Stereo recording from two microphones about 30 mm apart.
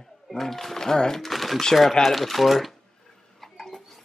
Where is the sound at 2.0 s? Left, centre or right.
Centre.